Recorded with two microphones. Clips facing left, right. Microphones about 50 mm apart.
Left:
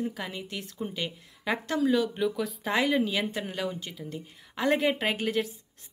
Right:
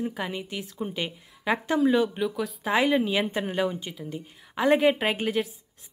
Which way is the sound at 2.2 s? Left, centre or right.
Centre.